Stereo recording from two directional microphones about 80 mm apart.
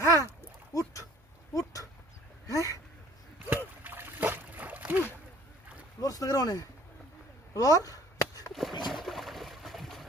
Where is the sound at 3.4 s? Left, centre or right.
Right.